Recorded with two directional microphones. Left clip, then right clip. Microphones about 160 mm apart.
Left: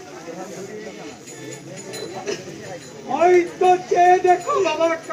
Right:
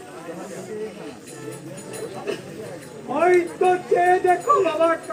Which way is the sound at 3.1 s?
20° left (ahead or behind).